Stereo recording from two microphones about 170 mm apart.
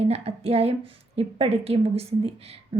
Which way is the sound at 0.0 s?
35° right (ahead or behind).